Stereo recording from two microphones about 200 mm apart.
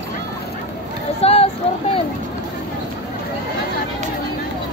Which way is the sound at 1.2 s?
30° left (ahead or behind).